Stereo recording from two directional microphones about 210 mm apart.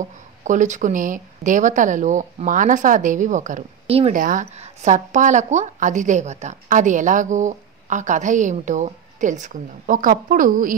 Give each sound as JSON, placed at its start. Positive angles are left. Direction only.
{"t": 0.5, "sound": "a woman's voice", "side_deg": -35}